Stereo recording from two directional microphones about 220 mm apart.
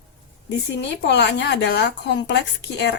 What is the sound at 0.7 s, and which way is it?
Speech, 50° left (ahead or behind).